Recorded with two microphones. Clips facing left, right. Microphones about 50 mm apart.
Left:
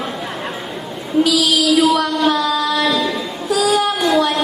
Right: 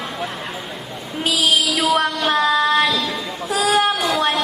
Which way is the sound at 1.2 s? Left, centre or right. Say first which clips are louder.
Left 4 dB; right.